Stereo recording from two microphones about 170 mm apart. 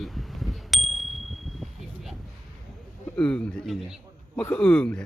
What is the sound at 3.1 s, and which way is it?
A man's voice, 5° left (ahead or behind).